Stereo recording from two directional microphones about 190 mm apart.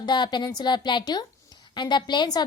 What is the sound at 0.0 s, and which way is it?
A woman's voice, 25° left (ahead or behind).